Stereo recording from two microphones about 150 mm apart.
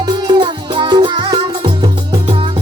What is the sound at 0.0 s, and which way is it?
Music, 30° right (ahead or behind).